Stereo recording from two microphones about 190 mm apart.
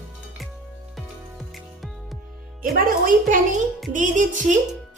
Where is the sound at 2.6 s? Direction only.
50° right (ahead or behind).